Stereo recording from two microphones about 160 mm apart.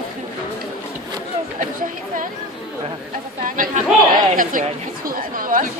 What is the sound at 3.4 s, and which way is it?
Speech, 55° right (ahead or behind).